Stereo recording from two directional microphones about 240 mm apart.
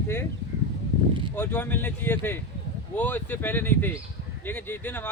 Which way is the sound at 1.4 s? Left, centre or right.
Centre.